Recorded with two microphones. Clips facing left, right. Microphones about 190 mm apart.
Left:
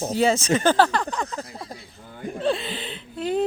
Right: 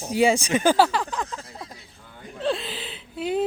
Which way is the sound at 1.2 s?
40° left (ahead or behind).